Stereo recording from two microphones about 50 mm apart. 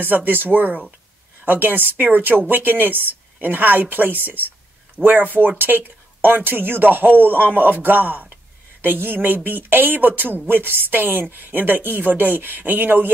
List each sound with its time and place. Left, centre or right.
0.0 s speech: right